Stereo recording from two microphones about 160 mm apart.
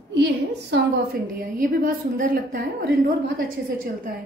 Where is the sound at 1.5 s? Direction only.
60° right (ahead or behind).